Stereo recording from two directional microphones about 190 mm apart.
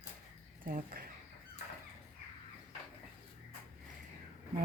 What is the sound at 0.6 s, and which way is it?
Speech, 50° right (ahead or behind).